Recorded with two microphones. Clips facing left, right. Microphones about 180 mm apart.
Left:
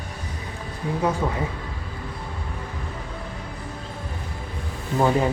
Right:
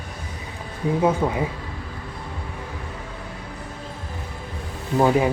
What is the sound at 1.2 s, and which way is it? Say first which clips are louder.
Speech: right 3 dB; 15° right (ahead or behind).